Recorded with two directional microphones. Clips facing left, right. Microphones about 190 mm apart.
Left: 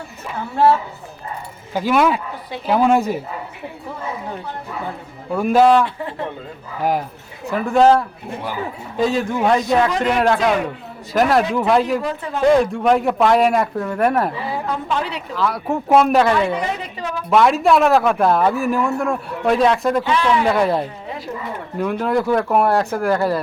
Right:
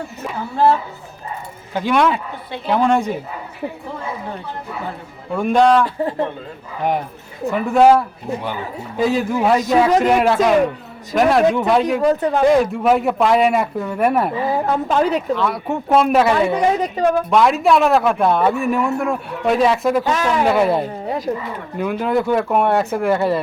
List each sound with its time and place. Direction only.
0.5 s speech: centre (ahead or behind)
5.3 s speech: 5° left (ahead or behind)
5.8 s speech: 40° right (ahead or behind)
7.5 s speech: centre (ahead or behind)
12.0 s speech: 40° right (ahead or behind)
12.5 s speech: 5° right (ahead or behind)
14.4 s speech: 45° right (ahead or behind)
15.4 s speech: centre (ahead or behind)
16.6 s speech: 45° right (ahead or behind)
17.2 s speech: centre (ahead or behind)
20.1 s speech: 45° right (ahead or behind)
20.5 s speech: 5° right (ahead or behind)
21.3 s speech: 35° right (ahead or behind)
21.8 s speech: centre (ahead or behind)